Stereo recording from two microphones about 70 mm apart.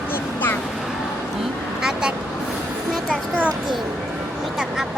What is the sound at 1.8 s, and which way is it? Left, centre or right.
Vehicle, centre.